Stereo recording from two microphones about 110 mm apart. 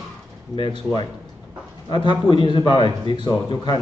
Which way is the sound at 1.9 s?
45° left (ahead or behind).